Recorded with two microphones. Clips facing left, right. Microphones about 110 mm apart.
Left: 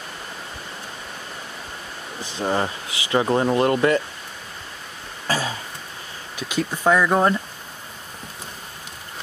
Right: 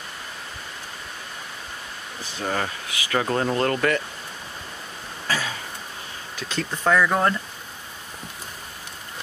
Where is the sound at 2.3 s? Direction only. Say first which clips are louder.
Left 4 dB; 25° left (ahead or behind).